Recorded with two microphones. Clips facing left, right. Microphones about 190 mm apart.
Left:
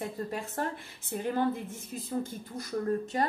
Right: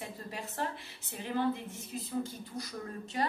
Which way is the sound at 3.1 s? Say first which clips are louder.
Left 1 dB; 45° left (ahead or behind).